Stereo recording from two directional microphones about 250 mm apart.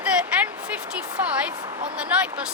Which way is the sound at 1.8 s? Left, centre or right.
Centre.